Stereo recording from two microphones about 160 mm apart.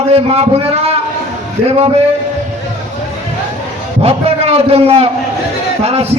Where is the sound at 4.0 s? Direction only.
40° right (ahead or behind).